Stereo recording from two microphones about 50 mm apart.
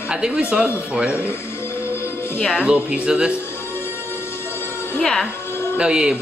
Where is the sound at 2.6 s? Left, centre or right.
Centre.